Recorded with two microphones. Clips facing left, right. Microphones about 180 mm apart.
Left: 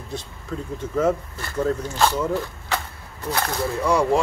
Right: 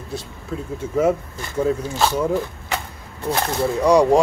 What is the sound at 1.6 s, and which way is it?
Speech, 10° right (ahead or behind).